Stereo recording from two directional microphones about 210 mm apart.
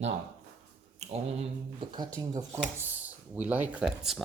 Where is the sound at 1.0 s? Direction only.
30° right (ahead or behind).